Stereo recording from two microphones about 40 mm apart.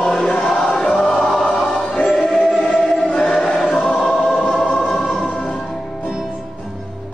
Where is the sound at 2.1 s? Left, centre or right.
Centre.